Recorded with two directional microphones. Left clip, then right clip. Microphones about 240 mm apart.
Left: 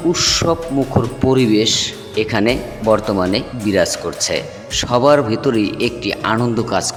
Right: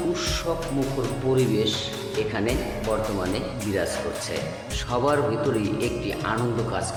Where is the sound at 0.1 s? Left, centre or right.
Left.